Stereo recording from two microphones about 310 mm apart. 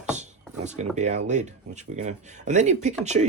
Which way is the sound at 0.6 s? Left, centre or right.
Right.